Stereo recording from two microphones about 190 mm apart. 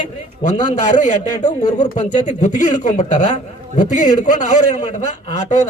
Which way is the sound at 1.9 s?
40° left (ahead or behind).